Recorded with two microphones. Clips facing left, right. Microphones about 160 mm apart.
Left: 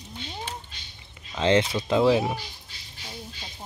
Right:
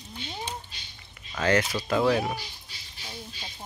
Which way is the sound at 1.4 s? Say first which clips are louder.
Left 3 dB; 25° left (ahead or behind).